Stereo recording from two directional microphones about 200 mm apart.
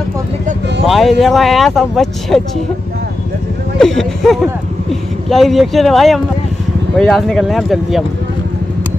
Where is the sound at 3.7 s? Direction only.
Centre (ahead or behind).